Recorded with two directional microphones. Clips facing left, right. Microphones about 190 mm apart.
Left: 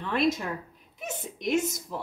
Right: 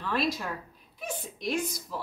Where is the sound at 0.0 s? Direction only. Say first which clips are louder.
Left 4 dB; 20° left (ahead or behind).